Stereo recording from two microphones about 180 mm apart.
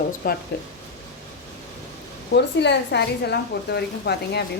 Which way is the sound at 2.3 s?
70° left (ahead or behind).